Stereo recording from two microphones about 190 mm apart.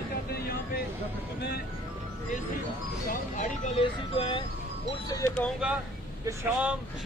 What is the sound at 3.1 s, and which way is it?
Speech, 40° left (ahead or behind).